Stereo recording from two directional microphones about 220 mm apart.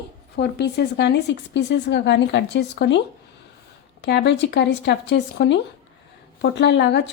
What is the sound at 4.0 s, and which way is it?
Speech, 50° left (ahead or behind).